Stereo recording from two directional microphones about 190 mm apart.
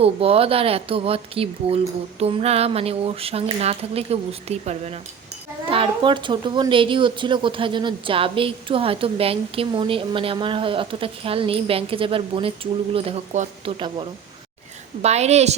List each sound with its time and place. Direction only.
0.0 s speech: 30° right (ahead or behind)
15.0 s speech: 35° right (ahead or behind)